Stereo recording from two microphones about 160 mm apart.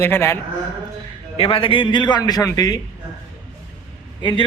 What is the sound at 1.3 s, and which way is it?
A man's voice, 35° left (ahead or behind).